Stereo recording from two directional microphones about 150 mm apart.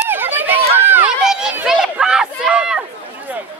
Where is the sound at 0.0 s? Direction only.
15° right (ahead or behind).